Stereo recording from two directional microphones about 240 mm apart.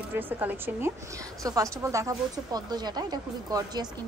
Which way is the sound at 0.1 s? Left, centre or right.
Centre.